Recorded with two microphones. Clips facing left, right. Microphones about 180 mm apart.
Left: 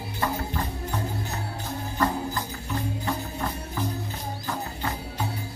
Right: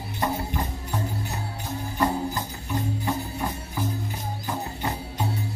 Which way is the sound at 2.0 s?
15° right (ahead or behind).